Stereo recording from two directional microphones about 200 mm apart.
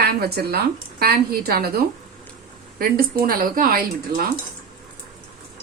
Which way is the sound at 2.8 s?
50° right (ahead or behind).